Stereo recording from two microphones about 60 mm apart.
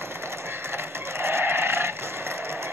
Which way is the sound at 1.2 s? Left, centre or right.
Right.